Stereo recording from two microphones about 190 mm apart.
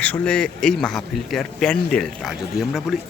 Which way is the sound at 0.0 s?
5° left (ahead or behind).